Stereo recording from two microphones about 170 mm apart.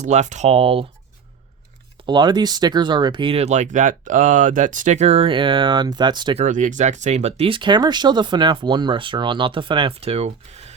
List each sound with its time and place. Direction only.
0.0 s speech: 45° right (ahead or behind)
2.0 s speech: 25° right (ahead or behind)
6.4 s speech: 45° right (ahead or behind)